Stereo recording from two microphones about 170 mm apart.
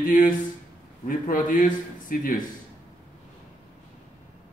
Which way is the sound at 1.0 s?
55° left (ahead or behind).